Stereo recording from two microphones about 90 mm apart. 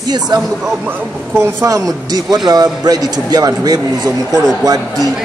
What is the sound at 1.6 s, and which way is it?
A man's voice, 40° right (ahead or behind).